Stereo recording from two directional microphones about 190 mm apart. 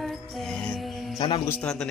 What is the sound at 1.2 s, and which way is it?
Speech, 30° left (ahead or behind).